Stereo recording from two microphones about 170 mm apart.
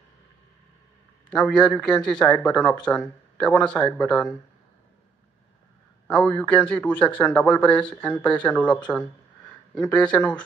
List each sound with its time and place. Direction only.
1.3 s a man's voice: 5° left (ahead or behind)
6.0 s speech: 10° left (ahead or behind)